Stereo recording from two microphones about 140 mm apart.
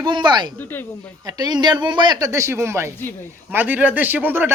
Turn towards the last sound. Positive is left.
turn(degrees=-15)  # may be behind; listen again after turning